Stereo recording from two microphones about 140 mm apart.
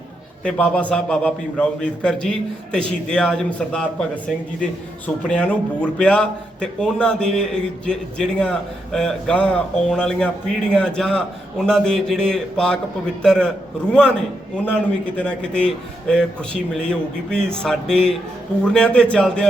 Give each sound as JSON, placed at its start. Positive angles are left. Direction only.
{"t": 0.4, "sound": "a man's voice", "side_deg": 10}